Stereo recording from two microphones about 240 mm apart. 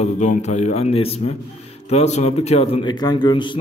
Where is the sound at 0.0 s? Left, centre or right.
Left.